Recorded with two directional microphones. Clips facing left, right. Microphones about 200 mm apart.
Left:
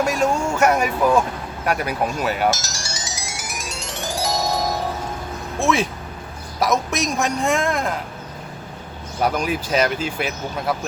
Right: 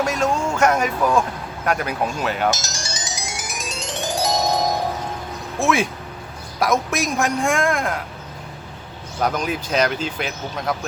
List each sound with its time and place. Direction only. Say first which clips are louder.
0.0 s speech: left 1 dB; 10° left (ahead or behind)
2.5 s music: even; 20° right (ahead or behind)
5.5 s a man's voice: even; centre (ahead or behind)
9.2 s speech: left 1 dB; 10° left (ahead or behind)